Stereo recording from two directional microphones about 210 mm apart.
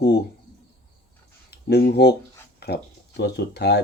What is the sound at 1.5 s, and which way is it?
Speech, 50° left (ahead or behind).